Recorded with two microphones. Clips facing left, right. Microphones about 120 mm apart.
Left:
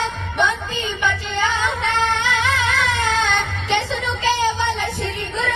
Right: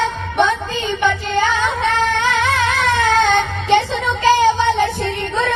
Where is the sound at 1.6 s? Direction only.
55° right (ahead or behind).